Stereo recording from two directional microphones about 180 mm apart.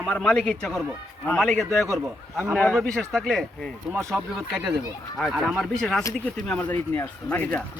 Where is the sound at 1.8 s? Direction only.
15° right (ahead or behind).